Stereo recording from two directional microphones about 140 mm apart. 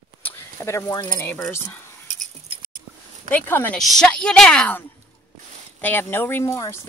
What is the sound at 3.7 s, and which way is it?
A woman's voice, centre (ahead or behind).